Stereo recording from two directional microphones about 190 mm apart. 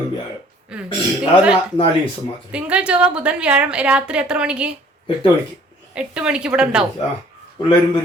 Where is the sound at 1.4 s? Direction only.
5° right (ahead or behind).